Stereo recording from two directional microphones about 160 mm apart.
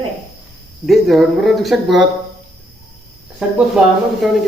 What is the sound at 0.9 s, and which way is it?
Speech, centre (ahead or behind).